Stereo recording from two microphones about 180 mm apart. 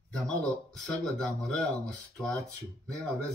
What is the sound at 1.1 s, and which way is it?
Speech, 5° left (ahead or behind).